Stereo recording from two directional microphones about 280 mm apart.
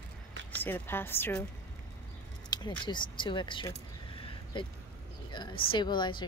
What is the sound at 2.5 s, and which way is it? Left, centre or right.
A woman's voice, centre.